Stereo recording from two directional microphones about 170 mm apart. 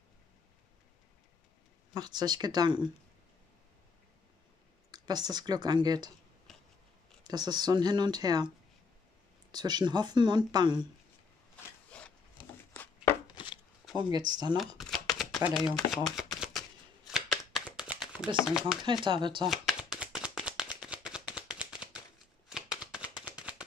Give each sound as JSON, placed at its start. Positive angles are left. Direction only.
{"t": 2.0, "sound": "speech", "side_deg": -25}
{"t": 4.9, "sound": "speech", "side_deg": -25}
{"t": 6.5, "sound": "scissors", "side_deg": 0}
{"t": 7.2, "sound": "speech", "side_deg": -25}
{"t": 9.5, "sound": "speech", "side_deg": -25}
{"t": 11.9, "sound": "a sound", "side_deg": 5}
{"t": 13.3, "sound": "chopping", "side_deg": 30}
{"t": 14.1, "sound": "speech", "side_deg": -25}
{"t": 14.8, "sound": "shuffling cards", "side_deg": 0}
{"t": 15.4, "sound": "speech", "side_deg": -5}
{"t": 17.1, "sound": "a sound", "side_deg": 0}
{"t": 18.0, "sound": "speech", "side_deg": -5}
{"t": 18.9, "sound": "speech", "side_deg": -30}
{"t": 19.4, "sound": "a sound", "side_deg": 0}